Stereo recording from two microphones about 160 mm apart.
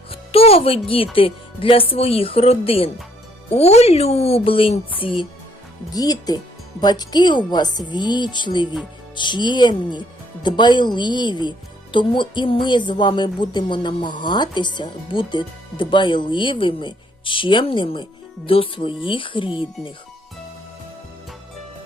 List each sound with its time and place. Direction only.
0.1 s music: 40° left (ahead or behind)
1.1 s speech: 35° left (ahead or behind)